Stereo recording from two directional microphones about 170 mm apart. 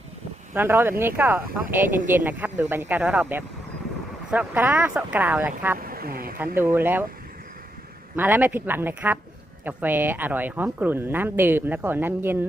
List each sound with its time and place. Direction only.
0.5 s speech: 15° right (ahead or behind)
5.8 s a sound: 60° right (ahead or behind)
6.6 s speech: 10° right (ahead or behind)
8.1 s speech: 10° right (ahead or behind)